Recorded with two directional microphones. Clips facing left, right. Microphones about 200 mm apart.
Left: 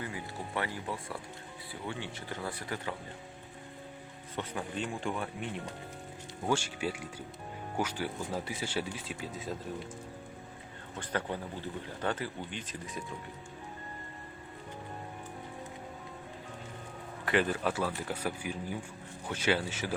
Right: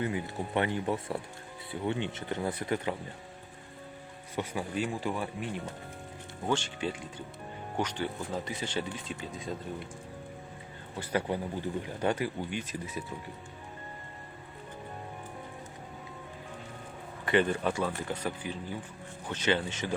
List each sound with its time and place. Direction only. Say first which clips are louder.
0.0 s speech: right 7 dB; 20° right (ahead or behind)
4.4 s speech: right 4 dB; 5° right (ahead or behind)
10.9 s speech: right 4 dB; 10° right (ahead or behind)
17.2 s speech: right 3 dB; centre (ahead or behind)